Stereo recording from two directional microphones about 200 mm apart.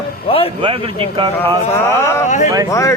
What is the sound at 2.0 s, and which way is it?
Speech, 15° left (ahead or behind).